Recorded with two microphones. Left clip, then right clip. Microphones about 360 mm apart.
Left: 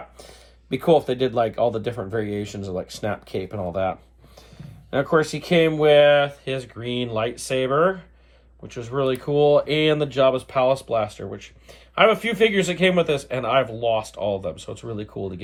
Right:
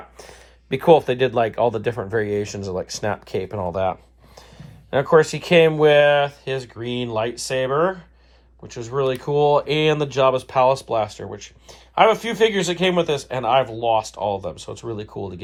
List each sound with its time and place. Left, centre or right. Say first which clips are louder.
0.7 s speech: right 4 dB; centre
4.9 s speech: right 5 dB; right